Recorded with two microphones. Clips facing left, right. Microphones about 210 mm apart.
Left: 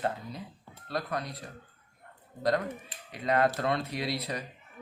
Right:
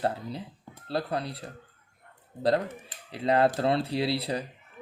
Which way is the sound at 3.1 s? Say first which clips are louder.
Right 3 dB; 30° right (ahead or behind).